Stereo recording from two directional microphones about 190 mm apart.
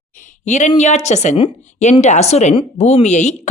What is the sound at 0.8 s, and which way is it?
A man's voice, 35° left (ahead or behind).